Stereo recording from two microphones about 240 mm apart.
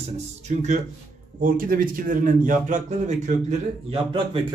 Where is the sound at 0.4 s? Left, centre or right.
Right.